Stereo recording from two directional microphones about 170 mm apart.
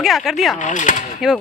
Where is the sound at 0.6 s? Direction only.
50° left (ahead or behind).